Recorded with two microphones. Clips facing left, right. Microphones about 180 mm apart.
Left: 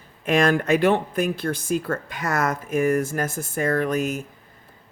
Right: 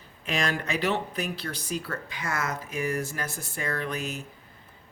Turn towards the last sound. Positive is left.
turn(degrees=45)  # may be behind; listen again after turning